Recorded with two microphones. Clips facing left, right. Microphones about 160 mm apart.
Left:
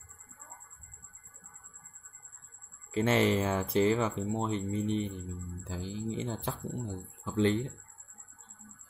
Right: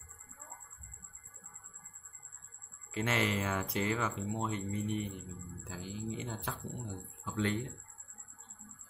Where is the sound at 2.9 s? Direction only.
30° left (ahead or behind).